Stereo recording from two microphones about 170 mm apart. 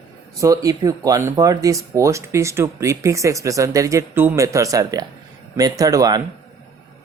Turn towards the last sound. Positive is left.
turn(degrees=-20)  # may be behind; listen again after turning